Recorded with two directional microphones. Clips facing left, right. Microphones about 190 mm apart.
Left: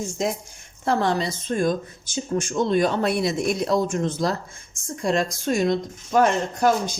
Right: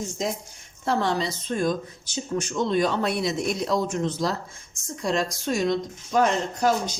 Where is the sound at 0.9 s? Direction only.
55° left (ahead or behind).